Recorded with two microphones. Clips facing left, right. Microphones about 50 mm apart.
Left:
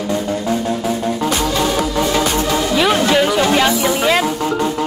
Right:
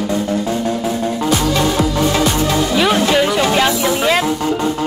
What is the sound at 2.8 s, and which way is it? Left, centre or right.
Music, centre.